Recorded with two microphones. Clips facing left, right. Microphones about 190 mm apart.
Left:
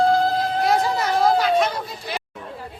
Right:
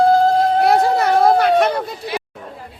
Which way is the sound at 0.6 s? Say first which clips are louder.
Right 6 dB; 60° right (ahead or behind).